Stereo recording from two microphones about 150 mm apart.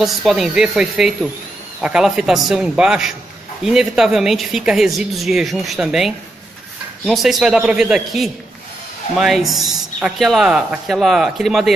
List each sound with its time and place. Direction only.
0.0 s speech: centre (ahead or behind)